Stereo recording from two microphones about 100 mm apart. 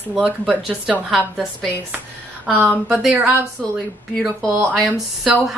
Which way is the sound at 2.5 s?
15° right (ahead or behind).